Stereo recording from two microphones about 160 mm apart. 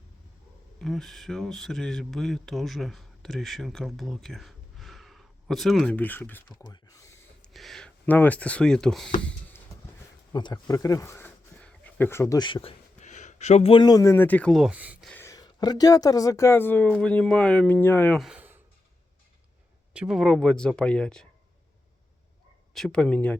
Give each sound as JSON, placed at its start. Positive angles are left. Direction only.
{"t": 0.8, "sound": "speech", "side_deg": 0}
{"t": 6.5, "sound": "speech", "side_deg": 25}
{"t": 7.4, "sound": "speech", "side_deg": 0}
{"t": 10.3, "sound": "speech", "side_deg": 25}
{"t": 13.0, "sound": "speech", "side_deg": 50}
{"t": 15.0, "sound": "speech", "side_deg": 10}
{"t": 18.2, "sound": "a sound", "side_deg": -5}
{"t": 19.9, "sound": "speech", "side_deg": -5}
{"t": 22.7, "sound": "speech", "side_deg": 5}